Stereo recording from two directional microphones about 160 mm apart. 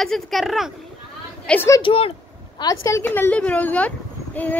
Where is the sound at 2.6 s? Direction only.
20° left (ahead or behind).